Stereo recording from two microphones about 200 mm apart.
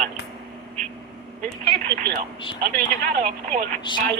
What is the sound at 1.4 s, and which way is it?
Speech, 45° right (ahead or behind).